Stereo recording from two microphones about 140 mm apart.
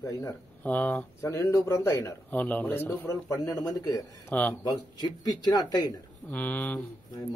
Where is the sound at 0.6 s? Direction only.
10° left (ahead or behind).